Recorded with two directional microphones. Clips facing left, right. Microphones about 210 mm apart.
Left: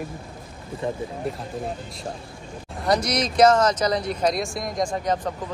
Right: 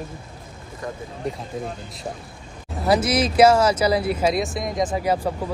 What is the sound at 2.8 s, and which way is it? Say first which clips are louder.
Speech: right 3 dB; 5° right (ahead or behind).